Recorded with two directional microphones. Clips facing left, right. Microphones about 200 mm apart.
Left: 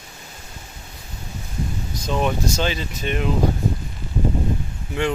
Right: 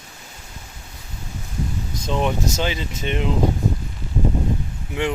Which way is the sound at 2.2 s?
15° right (ahead or behind).